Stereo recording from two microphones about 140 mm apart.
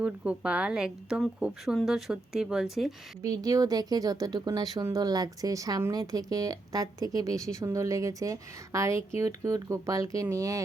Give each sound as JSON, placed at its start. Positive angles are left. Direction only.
{"t": 0.0, "sound": "a woman's voice", "side_deg": -10}
{"t": 3.2, "sound": "speech", "side_deg": -25}